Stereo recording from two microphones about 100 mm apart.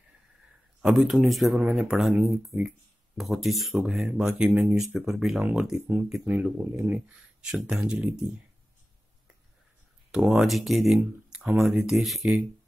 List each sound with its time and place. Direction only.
0.8 s speech: 5° right (ahead or behind)
7.4 s speech: 5° right (ahead or behind)
10.1 s speech: 5° right (ahead or behind)